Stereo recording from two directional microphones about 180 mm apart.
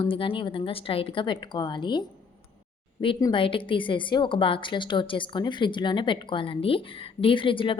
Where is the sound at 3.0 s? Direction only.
30° left (ahead or behind).